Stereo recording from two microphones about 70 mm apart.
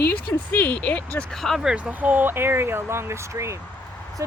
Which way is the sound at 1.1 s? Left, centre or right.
Centre.